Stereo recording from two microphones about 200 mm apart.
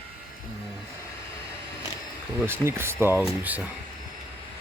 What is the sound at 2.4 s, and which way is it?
Speech, 10° right (ahead or behind).